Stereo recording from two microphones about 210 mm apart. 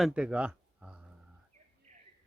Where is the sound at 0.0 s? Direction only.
5° right (ahead or behind).